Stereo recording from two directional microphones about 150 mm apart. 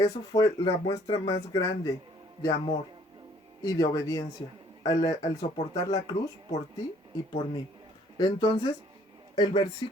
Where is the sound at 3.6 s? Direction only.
25° left (ahead or behind).